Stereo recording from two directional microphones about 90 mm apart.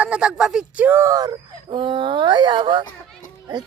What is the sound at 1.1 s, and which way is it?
Speech, 45° right (ahead or behind).